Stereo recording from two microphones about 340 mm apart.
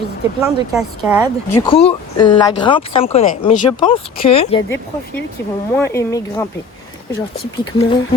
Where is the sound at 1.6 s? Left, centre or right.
Centre.